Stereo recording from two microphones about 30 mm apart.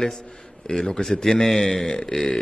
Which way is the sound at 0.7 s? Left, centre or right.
Left.